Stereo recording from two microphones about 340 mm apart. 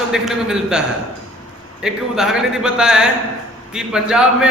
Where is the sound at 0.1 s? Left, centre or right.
Centre.